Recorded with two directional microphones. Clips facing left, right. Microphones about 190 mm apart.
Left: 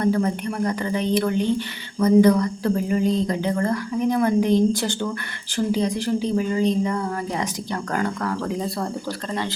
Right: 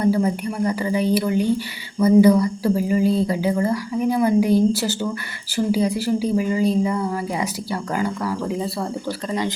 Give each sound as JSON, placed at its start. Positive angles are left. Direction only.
{"t": 0.0, "sound": "speech", "side_deg": -10}